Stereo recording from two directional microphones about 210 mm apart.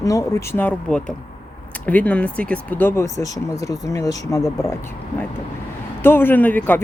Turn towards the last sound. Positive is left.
turn(degrees=10)  # may be behind; listen again after turning